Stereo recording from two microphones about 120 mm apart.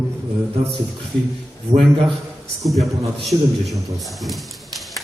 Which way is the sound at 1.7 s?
80° right.